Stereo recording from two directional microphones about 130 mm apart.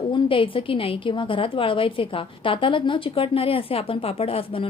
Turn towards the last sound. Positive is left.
turn(degrees=45)  # may be behind; listen again after turning